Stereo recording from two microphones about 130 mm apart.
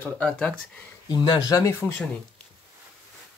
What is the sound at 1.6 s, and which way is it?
Speech, 20° left (ahead or behind).